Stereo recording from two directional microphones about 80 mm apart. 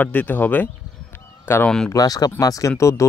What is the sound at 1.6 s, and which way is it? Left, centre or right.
Speech, centre.